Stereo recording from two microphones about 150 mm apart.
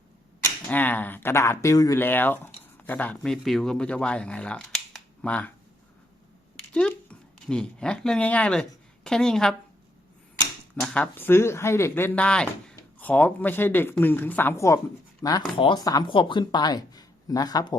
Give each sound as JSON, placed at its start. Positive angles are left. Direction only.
{"t": 0.7, "sound": "speech", "side_deg": 10}
{"t": 6.7, "sound": "a woman's voice", "side_deg": 5}
{"t": 10.8, "sound": "speech", "side_deg": 10}